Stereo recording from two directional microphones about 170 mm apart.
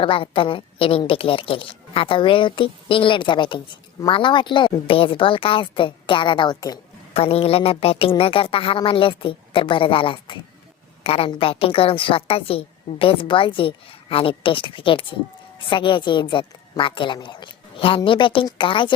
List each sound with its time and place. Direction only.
0.0 s a woman's voice: 30° left (ahead or behind)